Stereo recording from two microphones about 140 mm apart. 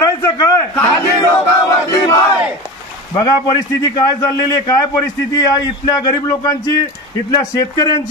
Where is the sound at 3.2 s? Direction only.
25° left (ahead or behind).